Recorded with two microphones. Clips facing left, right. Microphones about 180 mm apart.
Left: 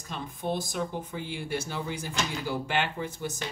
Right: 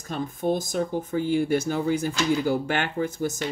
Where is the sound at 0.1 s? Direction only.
45° right (ahead or behind).